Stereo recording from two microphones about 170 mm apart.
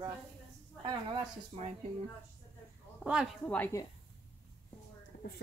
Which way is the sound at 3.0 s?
5° right (ahead or behind).